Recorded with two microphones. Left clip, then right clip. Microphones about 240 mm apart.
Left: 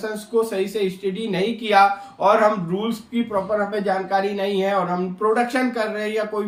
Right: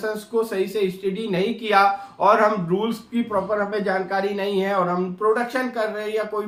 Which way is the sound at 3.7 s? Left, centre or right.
Centre.